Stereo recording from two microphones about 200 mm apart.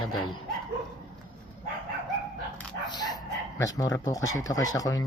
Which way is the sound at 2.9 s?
20° left (ahead or behind).